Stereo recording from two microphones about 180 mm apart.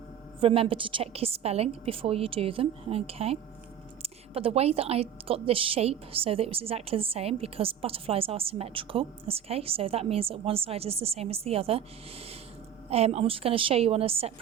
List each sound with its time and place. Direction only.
0.3 s a woman's voice: 30° right (ahead or behind)
12.9 s a woman's voice: 35° right (ahead or behind)